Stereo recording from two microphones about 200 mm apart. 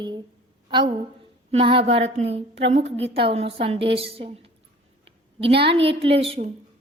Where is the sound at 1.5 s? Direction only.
25° right (ahead or behind).